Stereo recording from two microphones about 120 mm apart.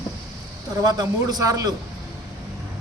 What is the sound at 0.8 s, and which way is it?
Speech, 35° right (ahead or behind).